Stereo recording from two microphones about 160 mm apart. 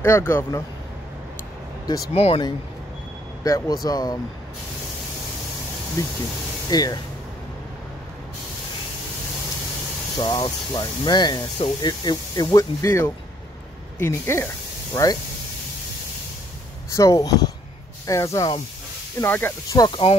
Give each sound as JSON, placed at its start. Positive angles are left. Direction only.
{"t": 0.0, "sound": "speech", "side_deg": 15}
{"t": 2.1, "sound": "speech", "side_deg": 40}
{"t": 3.4, "sound": "speech", "side_deg": 20}
{"t": 6.0, "sound": "speech", "side_deg": 20}
{"t": 10.1, "sound": "speech", "side_deg": 30}
{"t": 16.9, "sound": "speech", "side_deg": 20}
{"t": 19.8, "sound": "speech", "side_deg": 35}